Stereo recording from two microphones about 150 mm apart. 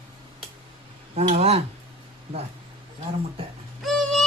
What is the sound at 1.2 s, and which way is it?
Speech, 45° right (ahead or behind).